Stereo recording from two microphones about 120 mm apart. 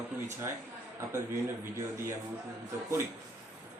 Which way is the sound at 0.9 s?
25° right (ahead or behind).